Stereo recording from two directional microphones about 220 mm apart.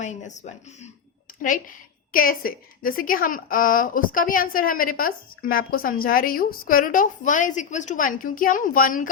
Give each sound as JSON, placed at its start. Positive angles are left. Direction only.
{"t": 0.0, "sound": "a woman's voice", "side_deg": 35}